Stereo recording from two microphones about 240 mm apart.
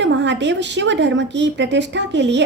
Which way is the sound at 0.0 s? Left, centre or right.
Right.